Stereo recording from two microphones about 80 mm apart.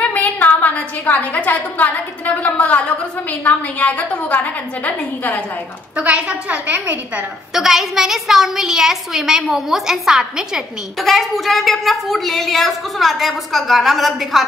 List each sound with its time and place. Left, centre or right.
0.1 s a woman's voice: left
5.9 s a woman's voice: centre
7.5 s a woman's voice: centre